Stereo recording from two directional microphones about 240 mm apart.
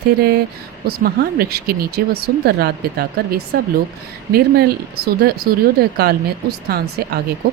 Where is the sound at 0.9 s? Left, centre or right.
Right.